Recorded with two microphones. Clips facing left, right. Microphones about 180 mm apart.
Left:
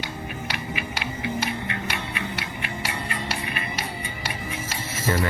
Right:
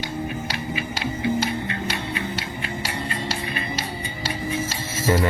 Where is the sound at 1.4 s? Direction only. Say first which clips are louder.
Right 3 dB; 30° right (ahead or behind).